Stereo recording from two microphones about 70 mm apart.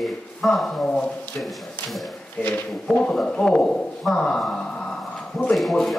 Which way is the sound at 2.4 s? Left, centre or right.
Left.